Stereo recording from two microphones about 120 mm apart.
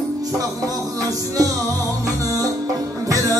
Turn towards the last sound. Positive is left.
turn(degrees=-30)  # may be behind; listen again after turning